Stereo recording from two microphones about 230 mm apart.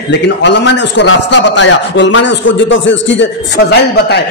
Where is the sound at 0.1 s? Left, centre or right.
Left.